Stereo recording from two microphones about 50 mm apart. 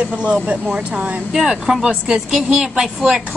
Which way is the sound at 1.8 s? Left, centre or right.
Centre.